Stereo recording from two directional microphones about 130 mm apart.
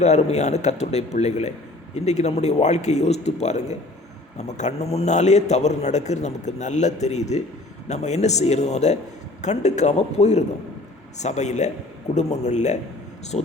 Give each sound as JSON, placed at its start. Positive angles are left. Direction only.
{"t": 0.0, "sound": "a man's voice", "side_deg": 60}